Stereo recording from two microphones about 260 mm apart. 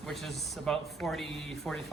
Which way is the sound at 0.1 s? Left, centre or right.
Centre.